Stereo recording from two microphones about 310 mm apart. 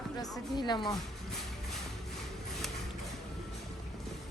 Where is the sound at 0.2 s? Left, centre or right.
Centre.